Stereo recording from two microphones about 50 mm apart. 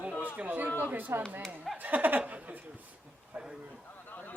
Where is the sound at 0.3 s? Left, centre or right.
Right.